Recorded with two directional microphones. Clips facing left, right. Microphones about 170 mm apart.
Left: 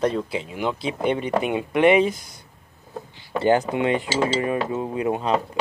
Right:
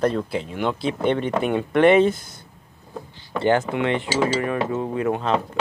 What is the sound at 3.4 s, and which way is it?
Speech, 20° left (ahead or behind).